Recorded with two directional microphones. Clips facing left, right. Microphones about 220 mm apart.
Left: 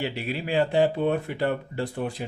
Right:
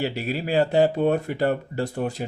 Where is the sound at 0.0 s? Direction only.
40° right (ahead or behind).